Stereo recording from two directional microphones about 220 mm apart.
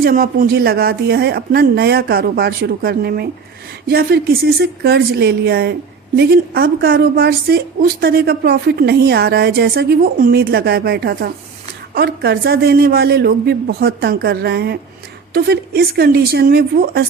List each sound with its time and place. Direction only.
0.0 s a woman's voice: 40° right (ahead or behind)